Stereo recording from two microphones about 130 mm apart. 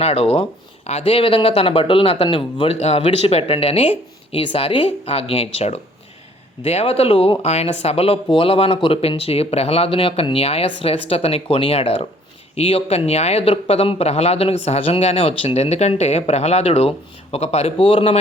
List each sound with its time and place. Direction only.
0.0 s speech: 50° left (ahead or behind)